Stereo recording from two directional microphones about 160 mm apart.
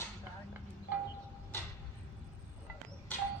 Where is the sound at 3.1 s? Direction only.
10° left (ahead or behind).